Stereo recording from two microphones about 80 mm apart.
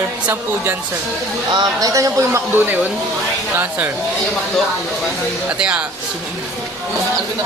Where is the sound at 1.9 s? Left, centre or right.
Right.